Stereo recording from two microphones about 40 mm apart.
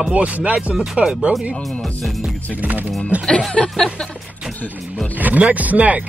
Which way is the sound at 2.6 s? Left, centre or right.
Right.